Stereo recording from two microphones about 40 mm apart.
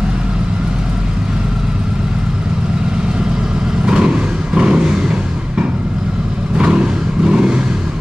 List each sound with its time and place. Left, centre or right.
3.8 s vehicle: right
6.6 s vehicle: right